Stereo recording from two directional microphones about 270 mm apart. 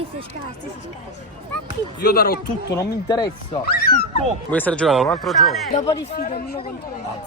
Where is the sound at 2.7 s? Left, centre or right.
Centre.